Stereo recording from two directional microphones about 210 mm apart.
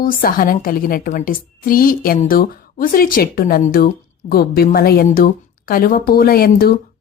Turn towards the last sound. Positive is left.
turn(degrees=45)  # may be behind; listen again after turning